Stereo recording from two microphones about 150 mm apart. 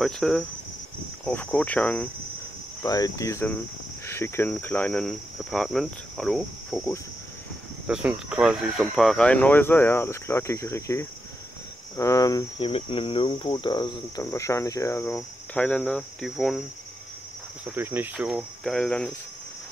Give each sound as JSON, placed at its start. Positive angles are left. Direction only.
{"t": 0.0, "sound": "speech", "side_deg": 0}
{"t": 1.2, "sound": "cricket", "side_deg": 10}
{"t": 2.8, "sound": "cricket", "side_deg": 20}
{"t": 12.0, "sound": "speech", "side_deg": 20}
{"t": 12.5, "sound": "speech", "side_deg": 35}
{"t": 17.6, "sound": "cricket", "side_deg": -15}
{"t": 18.6, "sound": "speech", "side_deg": 5}